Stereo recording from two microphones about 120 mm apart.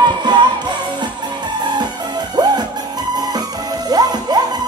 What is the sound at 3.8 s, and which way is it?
Music, 35° right (ahead or behind).